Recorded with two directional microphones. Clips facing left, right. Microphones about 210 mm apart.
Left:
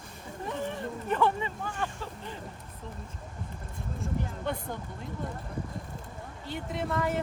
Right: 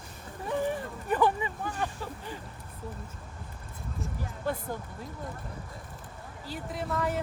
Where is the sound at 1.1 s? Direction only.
15° right (ahead or behind).